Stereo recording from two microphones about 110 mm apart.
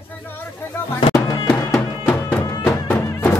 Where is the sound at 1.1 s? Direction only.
35° left (ahead or behind).